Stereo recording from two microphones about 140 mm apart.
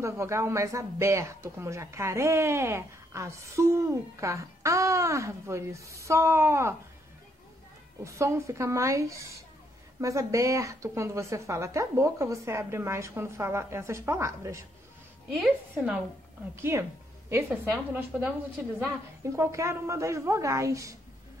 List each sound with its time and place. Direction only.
0.0 s speech: 20° right (ahead or behind)
8.0 s speech: 20° right (ahead or behind)
15.4 s a woman's voice: 5° right (ahead or behind)
16.5 s a woman's voice: 20° right (ahead or behind)
19.3 s speech: 20° right (ahead or behind)